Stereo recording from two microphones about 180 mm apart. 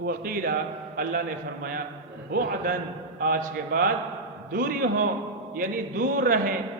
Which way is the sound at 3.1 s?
55° right (ahead or behind).